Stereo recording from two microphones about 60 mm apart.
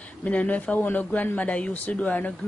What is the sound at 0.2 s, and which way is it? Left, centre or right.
Speech, left.